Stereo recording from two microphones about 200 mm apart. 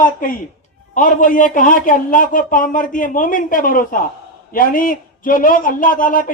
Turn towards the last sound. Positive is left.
turn(degrees=45)  # may be behind; listen again after turning